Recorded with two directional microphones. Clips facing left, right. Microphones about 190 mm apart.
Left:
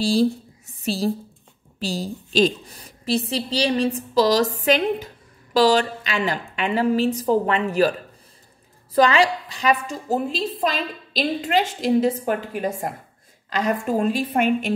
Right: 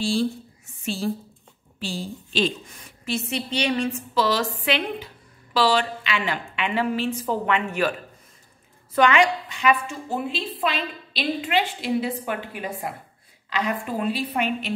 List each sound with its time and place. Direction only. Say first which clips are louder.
0.0 s a woman's voice: left 4 dB; 40° left (ahead or behind)
8.9 s a woman's voice: left 2 dB; 35° left (ahead or behind)